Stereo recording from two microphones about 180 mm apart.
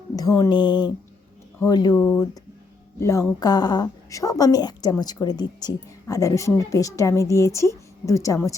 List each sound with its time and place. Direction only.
0.2 s a woman's voice: 20° left (ahead or behind)